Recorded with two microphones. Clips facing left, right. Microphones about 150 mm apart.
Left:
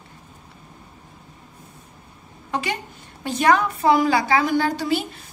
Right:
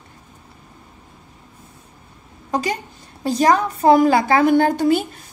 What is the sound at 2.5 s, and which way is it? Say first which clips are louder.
A woman's voice: right 4 dB; 40° right (ahead or behind).